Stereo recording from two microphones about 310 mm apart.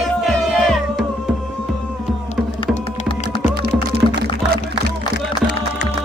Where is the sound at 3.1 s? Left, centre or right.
Centre.